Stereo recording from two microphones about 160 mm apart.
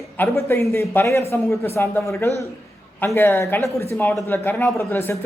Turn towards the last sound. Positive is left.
turn(degrees=15)  # may be behind; listen again after turning